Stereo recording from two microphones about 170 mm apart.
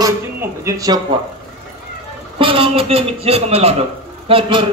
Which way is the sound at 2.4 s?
30° right (ahead or behind).